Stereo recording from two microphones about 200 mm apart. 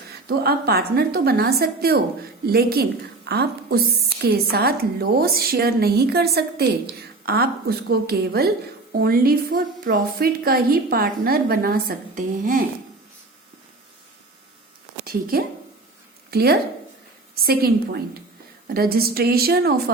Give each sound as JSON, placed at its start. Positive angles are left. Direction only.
{"t": 0.3, "sound": "a woman's voice", "side_deg": -50}
{"t": 15.0, "sound": "a woman's voice", "side_deg": -50}